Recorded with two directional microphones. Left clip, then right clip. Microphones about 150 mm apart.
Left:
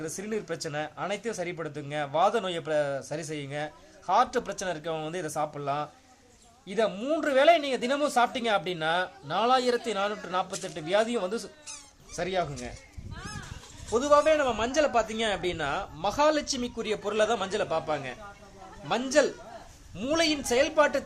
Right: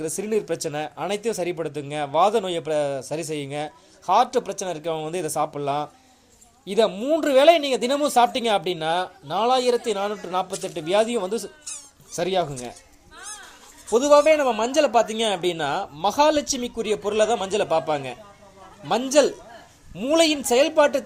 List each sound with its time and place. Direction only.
0.0 s a man's voice: 30° right (ahead or behind)
6.9 s speech: 20° right (ahead or behind)
13.9 s speech: 25° right (ahead or behind)